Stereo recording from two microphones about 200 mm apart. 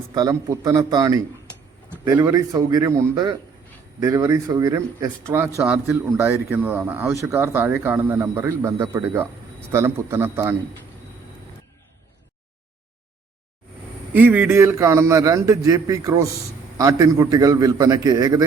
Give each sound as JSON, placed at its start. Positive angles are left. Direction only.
{"t": 0.1, "sound": "speech", "side_deg": -20}
{"t": 14.1, "sound": "speech", "side_deg": -10}